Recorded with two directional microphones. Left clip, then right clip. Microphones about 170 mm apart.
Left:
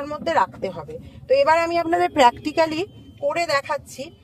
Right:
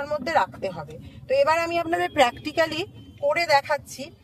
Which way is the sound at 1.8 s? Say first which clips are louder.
Left 6 dB; 35° left (ahead or behind).